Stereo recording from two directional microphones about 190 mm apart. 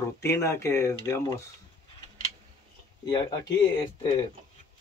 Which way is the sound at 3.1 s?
20° left (ahead or behind).